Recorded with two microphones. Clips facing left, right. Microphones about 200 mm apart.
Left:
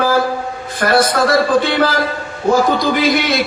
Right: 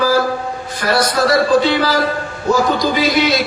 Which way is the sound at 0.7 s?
50° left (ahead or behind).